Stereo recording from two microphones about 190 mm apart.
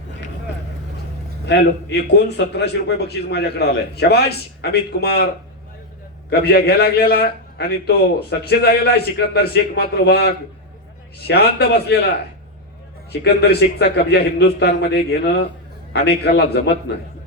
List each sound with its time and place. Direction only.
1.5 s a man's voice: 65° left (ahead or behind)
6.3 s a man's voice: 55° left (ahead or behind)
13.2 s a man's voice: 60° left (ahead or behind)